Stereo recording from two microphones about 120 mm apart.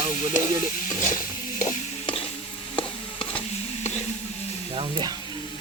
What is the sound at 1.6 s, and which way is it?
Stir, 85° left.